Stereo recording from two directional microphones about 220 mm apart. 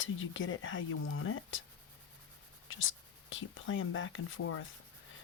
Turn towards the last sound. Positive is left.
turn(degrees=65)  # may be behind; listen again after turning